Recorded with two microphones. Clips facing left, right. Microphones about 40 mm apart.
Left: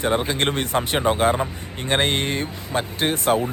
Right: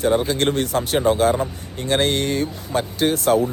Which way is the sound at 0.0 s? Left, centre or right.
Left.